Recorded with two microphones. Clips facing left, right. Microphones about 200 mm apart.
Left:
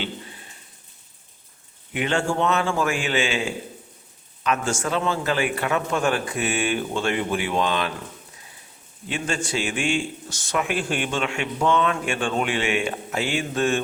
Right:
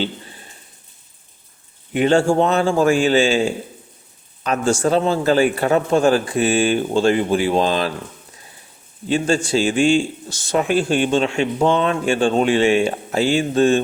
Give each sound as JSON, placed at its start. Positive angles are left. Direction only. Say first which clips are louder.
{"t": 0.0, "sound": "a sound", "louder": "right 7 dB", "side_deg": -35}
{"t": 1.9, "sound": "a man's voice", "louder": "right 9 dB", "side_deg": -35}
{"t": 9.0, "sound": "a man's voice", "louder": "right 9 dB", "side_deg": -30}